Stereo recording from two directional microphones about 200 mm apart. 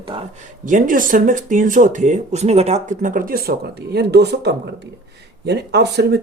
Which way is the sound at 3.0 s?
45° right (ahead or behind).